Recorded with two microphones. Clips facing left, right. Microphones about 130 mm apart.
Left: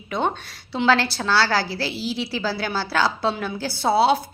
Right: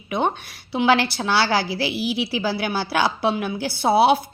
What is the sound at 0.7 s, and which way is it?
A woman's voice, 15° right (ahead or behind).